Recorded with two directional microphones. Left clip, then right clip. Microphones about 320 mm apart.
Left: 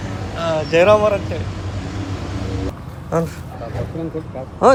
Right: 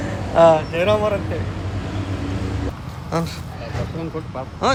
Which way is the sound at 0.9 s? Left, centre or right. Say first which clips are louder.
Left 4 dB; centre.